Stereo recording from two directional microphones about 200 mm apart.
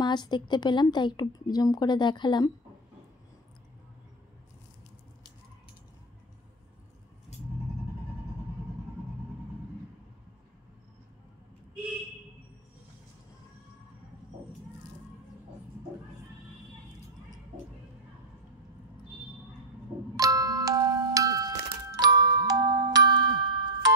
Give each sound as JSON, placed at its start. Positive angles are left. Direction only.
{"t": 0.0, "sound": "speech", "side_deg": 20}
{"t": 20.2, "sound": "music", "side_deg": -20}